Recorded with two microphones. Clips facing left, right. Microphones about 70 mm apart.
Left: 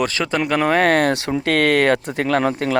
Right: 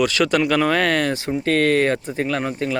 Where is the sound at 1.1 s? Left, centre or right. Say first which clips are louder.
Left 1 dB; left.